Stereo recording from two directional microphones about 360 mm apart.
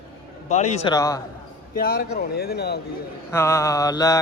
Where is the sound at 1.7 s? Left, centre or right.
Left.